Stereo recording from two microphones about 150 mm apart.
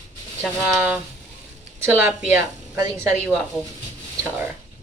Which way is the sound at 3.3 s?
Centre (ahead or behind).